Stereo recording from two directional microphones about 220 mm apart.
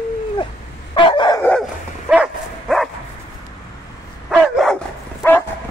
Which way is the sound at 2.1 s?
Centre (ahead or behind).